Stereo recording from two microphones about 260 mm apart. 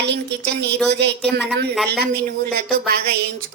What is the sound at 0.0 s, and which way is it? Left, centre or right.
A woman's voice, right.